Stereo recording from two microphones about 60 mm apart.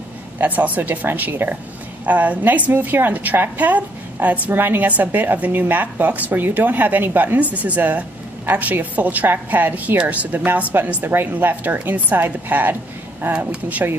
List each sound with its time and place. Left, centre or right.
0.4 s a woman's voice: right